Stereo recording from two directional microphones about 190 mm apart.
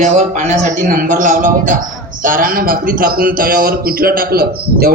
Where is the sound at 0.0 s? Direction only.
40° right (ahead or behind).